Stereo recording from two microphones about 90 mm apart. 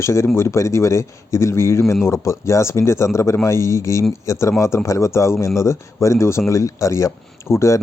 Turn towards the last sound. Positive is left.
turn(degrees=30)  # may be behind; listen again after turning